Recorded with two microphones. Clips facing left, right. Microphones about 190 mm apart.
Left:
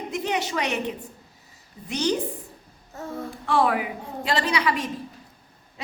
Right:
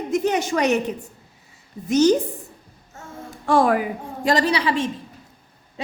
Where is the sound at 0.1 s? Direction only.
45° right (ahead or behind).